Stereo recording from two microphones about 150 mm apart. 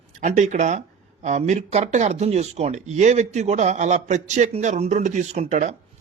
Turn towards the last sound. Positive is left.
turn(degrees=-50)  # may be behind; listen again after turning